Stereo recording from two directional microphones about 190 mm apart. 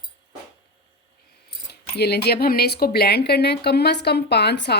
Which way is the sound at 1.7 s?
60° left (ahead or behind).